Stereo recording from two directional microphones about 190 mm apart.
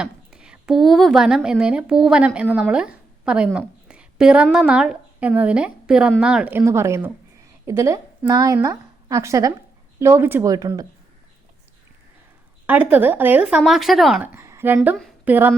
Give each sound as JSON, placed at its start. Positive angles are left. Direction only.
{"t": 0.3, "sound": "a woman's voice", "side_deg": -5}
{"t": 12.6, "sound": "speech", "side_deg": -10}
{"t": 14.3, "sound": "a sound", "side_deg": -15}
{"t": 14.8, "sound": "a woman's voice", "side_deg": 0}